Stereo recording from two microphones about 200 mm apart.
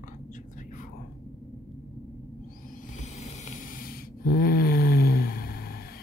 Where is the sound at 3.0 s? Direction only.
35° left (ahead or behind).